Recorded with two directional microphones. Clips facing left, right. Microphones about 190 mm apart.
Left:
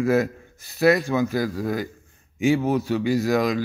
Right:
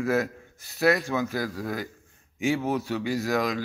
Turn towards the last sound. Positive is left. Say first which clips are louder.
# left 5 dB
turn(degrees=15)  # may be behind; listen again after turning